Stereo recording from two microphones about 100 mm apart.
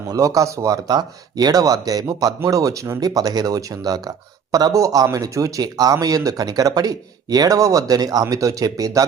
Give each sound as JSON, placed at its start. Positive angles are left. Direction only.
{"t": 0.1, "sound": "speech", "side_deg": -35}